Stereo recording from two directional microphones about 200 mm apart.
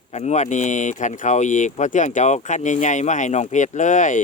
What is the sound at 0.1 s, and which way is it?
Speech, 35° left (ahead or behind).